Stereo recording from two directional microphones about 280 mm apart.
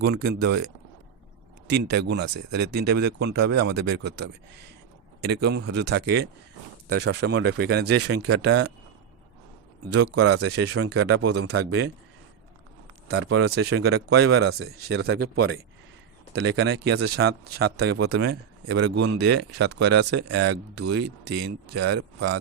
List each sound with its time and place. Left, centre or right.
0.0 s speech: right
1.6 s speech: right
9.9 s speech: right
10.2 s speech: right
11.1 s speech: right
13.1 s speech: right
14.3 s speech: right